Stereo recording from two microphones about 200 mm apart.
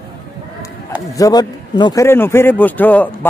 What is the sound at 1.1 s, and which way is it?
A man's voice, 20° left (ahead or behind).